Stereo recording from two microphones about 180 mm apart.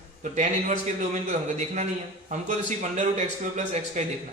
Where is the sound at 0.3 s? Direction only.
40° right (ahead or behind).